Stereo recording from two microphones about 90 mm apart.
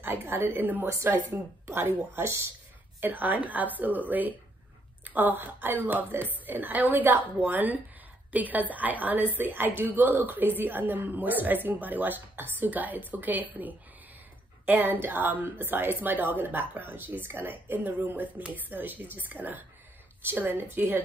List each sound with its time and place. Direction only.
0.0 s a woman's voice: 25° right (ahead or behind)
0.8 s a woman's voice: 30° right (ahead or behind)
5.0 s a woman's voice: 20° right (ahead or behind)